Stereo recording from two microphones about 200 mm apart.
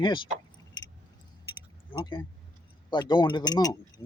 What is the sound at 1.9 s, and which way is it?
Speech, 25° left (ahead or behind).